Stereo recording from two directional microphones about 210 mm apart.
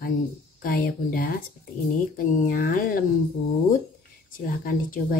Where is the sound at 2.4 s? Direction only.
40° left (ahead or behind).